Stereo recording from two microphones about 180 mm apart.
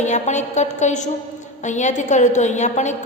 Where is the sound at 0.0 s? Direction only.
40° left (ahead or behind).